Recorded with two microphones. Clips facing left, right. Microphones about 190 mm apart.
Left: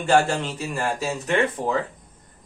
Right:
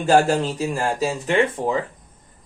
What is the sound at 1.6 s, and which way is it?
Speech, 20° right (ahead or behind).